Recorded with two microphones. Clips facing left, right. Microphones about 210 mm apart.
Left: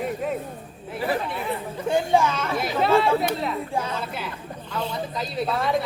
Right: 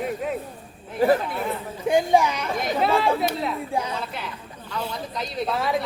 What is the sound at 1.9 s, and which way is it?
Speech, 15° right (ahead or behind).